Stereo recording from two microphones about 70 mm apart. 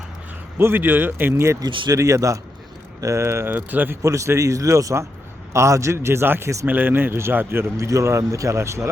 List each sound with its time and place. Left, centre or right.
0.6 s a man's voice: right
1.3 s a man's voice: right
3.5 s a man's voice: right
4.0 s a man's voice: right
7.8 s speech: right